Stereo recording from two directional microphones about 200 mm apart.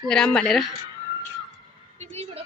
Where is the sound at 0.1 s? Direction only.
5° left (ahead or behind).